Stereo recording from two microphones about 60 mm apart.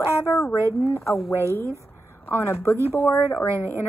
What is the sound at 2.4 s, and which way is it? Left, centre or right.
Speech, left.